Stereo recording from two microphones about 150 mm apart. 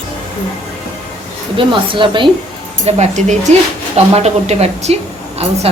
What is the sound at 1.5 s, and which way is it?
Speech, 35° right (ahead or behind).